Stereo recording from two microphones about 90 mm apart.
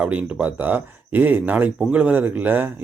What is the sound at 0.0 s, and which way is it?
Speech, 15° right (ahead or behind).